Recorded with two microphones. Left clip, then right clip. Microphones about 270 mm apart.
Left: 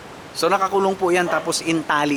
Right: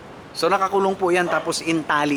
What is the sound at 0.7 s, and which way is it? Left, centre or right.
Speech, left.